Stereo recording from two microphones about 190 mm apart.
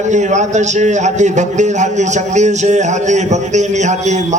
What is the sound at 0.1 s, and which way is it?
A man's voice, 40° right (ahead or behind).